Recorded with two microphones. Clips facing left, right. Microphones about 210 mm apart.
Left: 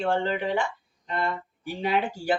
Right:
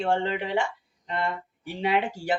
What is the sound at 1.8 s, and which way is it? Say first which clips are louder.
Speech: even; 25° right (ahead or behind).